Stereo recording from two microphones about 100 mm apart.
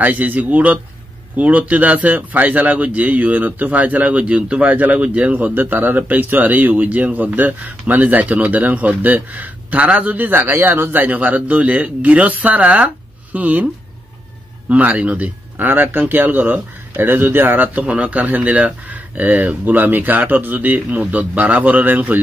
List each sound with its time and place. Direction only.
0.0 s a man's voice: 15° right (ahead or behind)
14.7 s a man's voice: 15° right (ahead or behind)